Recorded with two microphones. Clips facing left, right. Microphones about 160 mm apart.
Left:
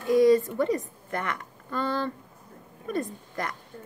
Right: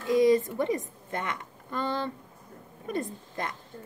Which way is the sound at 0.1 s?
20° right (ahead or behind).